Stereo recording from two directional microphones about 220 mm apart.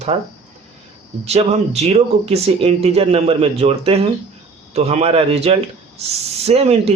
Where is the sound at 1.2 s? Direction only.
30° right (ahead or behind).